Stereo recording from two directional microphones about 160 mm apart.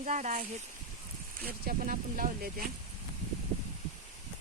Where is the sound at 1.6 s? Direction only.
60° right (ahead or behind).